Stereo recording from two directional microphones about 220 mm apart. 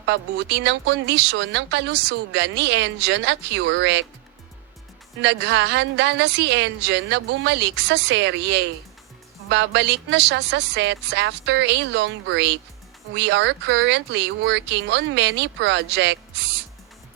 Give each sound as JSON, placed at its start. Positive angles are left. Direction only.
{"t": 0.0, "sound": "speech", "side_deg": -50}
{"t": 5.2, "sound": "speech", "side_deg": -50}